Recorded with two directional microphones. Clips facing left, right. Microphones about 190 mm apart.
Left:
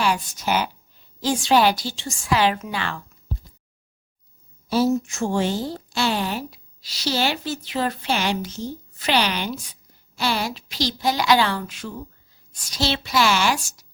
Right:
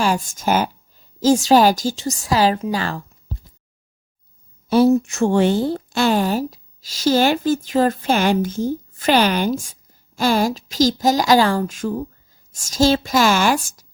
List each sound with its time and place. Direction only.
0.0 s a woman's voice: 45° right (ahead or behind)
4.7 s a woman's voice: 60° right (ahead or behind)